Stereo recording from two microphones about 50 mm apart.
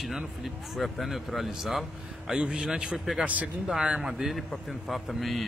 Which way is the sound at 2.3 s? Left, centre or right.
Centre.